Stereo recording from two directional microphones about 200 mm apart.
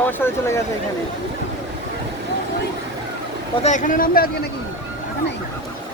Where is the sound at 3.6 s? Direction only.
40° left (ahead or behind).